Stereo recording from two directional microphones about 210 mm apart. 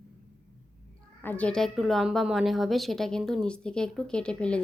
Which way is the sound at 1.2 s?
5° left (ahead or behind).